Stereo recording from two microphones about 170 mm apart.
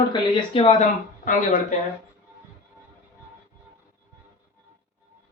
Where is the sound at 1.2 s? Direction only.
50° left (ahead or behind).